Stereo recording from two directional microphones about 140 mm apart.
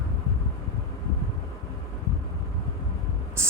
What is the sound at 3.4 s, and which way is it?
Spray, 20° right (ahead or behind).